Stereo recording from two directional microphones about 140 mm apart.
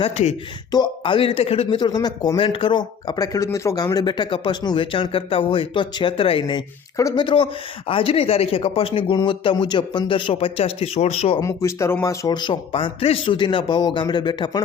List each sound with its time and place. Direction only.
0.0 s speech: 55° left (ahead or behind)
0.7 s speech: 35° left (ahead or behind)
1.8 s speech: 30° left (ahead or behind)
6.9 s speech: 25° left (ahead or behind)
7.9 s speech: 40° left (ahead or behind)
11.3 s speech: 20° left (ahead or behind)